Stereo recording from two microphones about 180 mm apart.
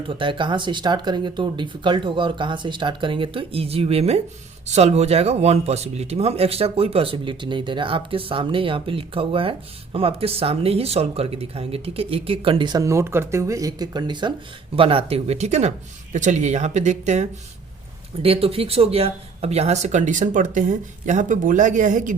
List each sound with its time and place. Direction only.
0.1 s speech: 30° right (ahead or behind); by 22.1 s 45° right (ahead or behind)